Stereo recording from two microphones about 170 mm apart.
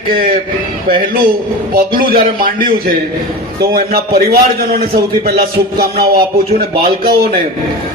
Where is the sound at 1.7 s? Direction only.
60° right (ahead or behind).